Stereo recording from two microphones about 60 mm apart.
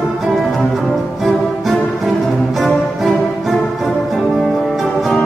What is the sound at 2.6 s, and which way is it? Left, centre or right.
Music, centre.